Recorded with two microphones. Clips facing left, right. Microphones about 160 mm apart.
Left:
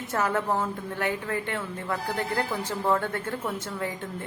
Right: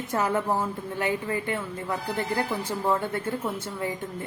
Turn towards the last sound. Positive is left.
turn(degrees=-10)  # may be behind; listen again after turning